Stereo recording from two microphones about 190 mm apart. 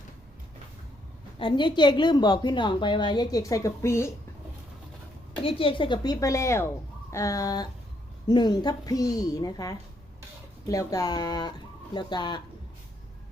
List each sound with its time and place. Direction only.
1.4 s a woman's voice: 25° left (ahead or behind)
5.4 s a woman's voice: 30° left (ahead or behind)